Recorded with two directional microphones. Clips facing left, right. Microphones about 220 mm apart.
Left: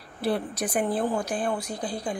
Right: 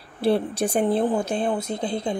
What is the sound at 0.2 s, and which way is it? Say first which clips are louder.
Speech: right 6 dB; 30° right (ahead or behind).